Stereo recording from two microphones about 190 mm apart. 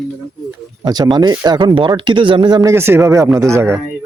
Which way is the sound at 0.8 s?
20° right (ahead or behind).